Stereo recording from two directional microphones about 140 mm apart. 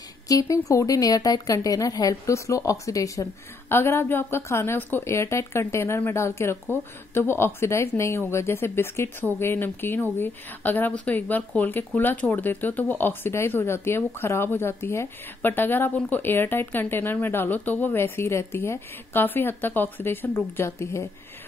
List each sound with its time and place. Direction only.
0.3 s speech: 25° left (ahead or behind)